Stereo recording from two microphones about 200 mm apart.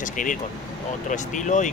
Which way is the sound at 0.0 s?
40° left (ahead or behind).